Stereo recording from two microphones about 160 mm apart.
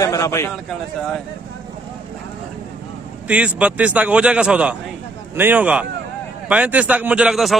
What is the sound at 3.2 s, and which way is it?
A man's voice, 10° right (ahead or behind).